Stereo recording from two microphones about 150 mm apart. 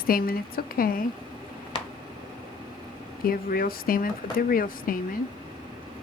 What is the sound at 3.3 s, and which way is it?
Speech, 75° left (ahead or behind).